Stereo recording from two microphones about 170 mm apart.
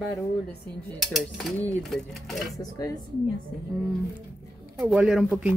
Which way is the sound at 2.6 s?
20° left (ahead or behind).